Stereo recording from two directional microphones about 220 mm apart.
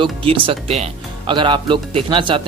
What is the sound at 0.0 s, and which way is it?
Speech, 25° right (ahead or behind).